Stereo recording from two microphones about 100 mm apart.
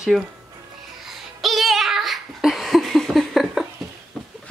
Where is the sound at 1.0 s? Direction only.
Centre (ahead or behind).